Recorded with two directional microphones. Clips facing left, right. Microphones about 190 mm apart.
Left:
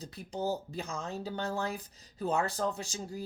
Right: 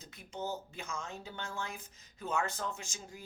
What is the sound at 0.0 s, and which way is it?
Speech, 35° left (ahead or behind).